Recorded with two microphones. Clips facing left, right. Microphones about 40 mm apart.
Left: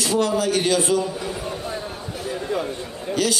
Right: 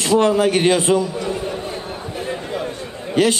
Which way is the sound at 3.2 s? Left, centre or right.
Right.